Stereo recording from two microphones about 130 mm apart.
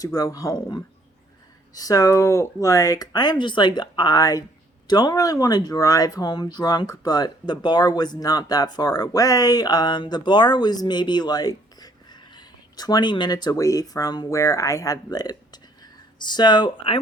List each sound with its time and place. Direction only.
0.0 s speech: 30° left (ahead or behind)